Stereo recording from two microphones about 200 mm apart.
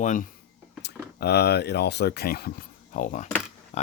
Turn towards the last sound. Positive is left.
turn(degrees=35)  # may be behind; listen again after turning